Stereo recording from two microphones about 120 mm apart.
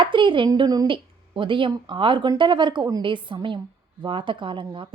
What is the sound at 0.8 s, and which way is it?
A woman's voice, 45° right (ahead or behind).